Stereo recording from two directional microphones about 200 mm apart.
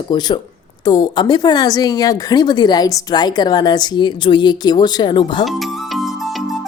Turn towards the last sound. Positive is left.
turn(degrees=25)  # may be behind; listen again after turning